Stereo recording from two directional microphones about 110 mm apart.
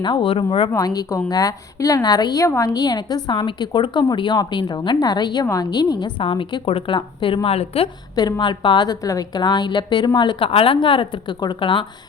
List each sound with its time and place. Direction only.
0.0 s a woman's voice: 45° left (ahead or behind)
0.7 s a woman's voice: 35° left (ahead or behind); by 7.3 s 50° left (ahead or behind)
7.4 s a woman's voice: 65° left (ahead or behind)
8.1 s a woman's voice: 40° left (ahead or behind)
10.5 s a woman's voice: 55° left (ahead or behind)